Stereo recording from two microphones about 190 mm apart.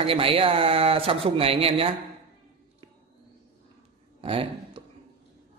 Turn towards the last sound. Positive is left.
turn(degrees=-30)  # may be behind; listen again after turning